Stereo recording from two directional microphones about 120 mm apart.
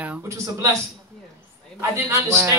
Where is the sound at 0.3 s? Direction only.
25° right (ahead or behind).